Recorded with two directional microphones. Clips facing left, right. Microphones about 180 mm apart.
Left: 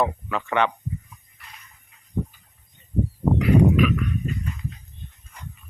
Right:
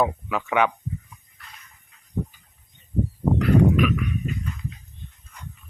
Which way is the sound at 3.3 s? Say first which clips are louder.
Left 1 dB; centre (ahead or behind).